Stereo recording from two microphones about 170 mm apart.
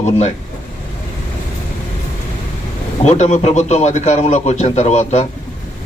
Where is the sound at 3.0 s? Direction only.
40° left (ahead or behind).